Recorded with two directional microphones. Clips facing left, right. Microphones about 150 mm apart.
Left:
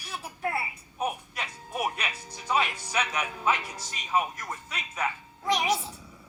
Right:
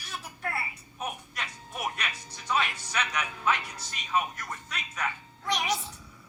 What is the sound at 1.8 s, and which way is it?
Music, 10° left (ahead or behind).